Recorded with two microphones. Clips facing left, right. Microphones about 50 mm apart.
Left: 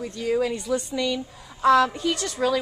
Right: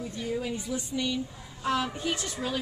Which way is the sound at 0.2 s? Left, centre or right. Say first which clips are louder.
Left 9 dB; left.